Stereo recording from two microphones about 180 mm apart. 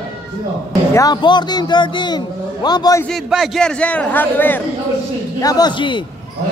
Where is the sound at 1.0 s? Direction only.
25° left (ahead or behind).